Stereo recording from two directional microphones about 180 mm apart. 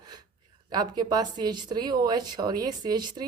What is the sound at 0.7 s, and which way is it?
A woman's voice, 20° right (ahead or behind).